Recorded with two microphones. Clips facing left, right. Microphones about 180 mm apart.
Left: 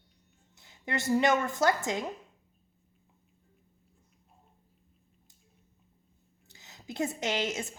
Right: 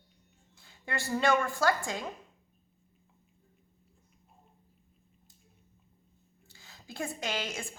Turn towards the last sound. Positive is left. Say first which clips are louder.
# left 4 dB
turn(degrees=20)  # may be behind; listen again after turning